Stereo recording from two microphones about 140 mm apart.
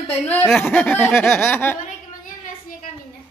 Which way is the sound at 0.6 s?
15° left (ahead or behind).